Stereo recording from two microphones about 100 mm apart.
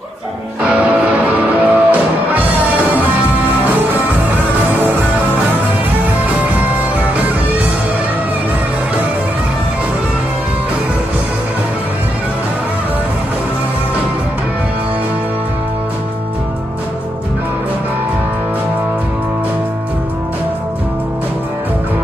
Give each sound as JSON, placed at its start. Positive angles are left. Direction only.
{"t": 0.6, "sound": "music", "side_deg": -15}